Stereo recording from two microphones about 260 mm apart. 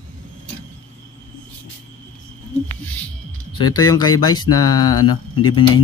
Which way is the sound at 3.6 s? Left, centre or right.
Centre.